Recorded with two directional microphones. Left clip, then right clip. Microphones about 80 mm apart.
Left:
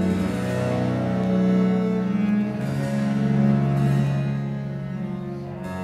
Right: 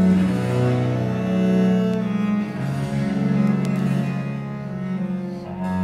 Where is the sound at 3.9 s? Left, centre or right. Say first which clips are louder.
Even; right.